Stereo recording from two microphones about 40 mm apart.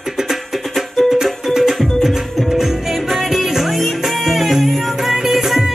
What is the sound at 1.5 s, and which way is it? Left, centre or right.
Music, centre.